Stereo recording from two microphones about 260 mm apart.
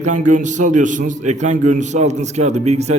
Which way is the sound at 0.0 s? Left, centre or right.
Right.